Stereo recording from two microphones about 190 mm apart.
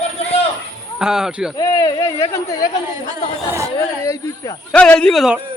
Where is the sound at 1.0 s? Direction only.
5° right (ahead or behind).